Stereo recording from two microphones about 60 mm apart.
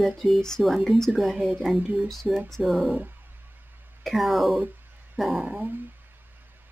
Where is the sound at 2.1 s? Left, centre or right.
Centre.